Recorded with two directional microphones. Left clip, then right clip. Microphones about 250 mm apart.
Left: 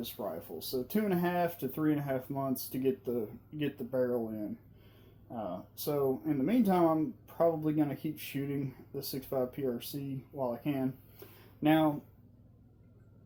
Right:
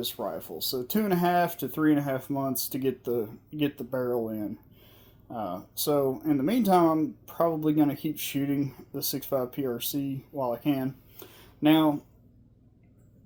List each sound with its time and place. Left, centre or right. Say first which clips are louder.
0.0 s speech: right 6 dB; right